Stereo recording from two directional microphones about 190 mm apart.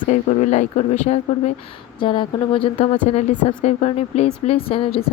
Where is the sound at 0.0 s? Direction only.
40° left (ahead or behind).